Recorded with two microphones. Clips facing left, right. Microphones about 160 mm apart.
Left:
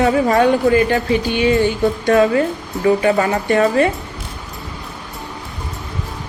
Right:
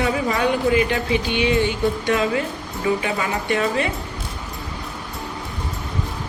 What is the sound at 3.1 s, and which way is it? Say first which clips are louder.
Speech: left 7 dB; 45° left (ahead or behind).